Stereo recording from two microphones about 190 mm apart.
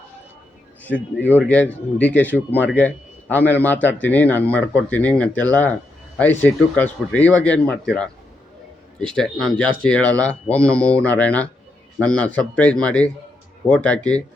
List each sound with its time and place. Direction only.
0.9 s a man's voice: 10° left (ahead or behind)